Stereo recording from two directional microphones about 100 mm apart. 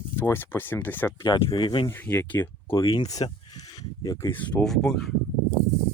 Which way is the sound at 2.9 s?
40° left (ahead or behind).